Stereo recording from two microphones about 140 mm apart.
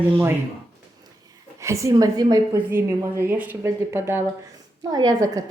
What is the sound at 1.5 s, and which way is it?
A woman's voice, 20° right (ahead or behind).